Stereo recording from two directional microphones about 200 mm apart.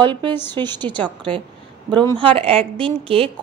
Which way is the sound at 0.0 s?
25° right (ahead or behind).